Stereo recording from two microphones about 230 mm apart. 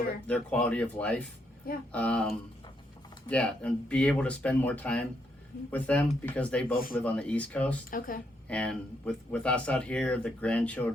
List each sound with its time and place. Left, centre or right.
0.3 s speech: centre
7.9 s a woman's voice: left
8.4 s speech: centre